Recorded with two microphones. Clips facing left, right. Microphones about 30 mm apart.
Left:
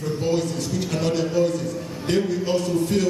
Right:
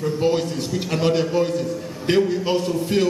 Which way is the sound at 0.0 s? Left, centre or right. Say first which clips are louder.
Right 3 dB; right.